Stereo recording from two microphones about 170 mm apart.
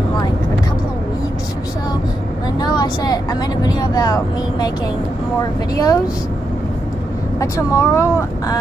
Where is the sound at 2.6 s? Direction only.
25° left (ahead or behind).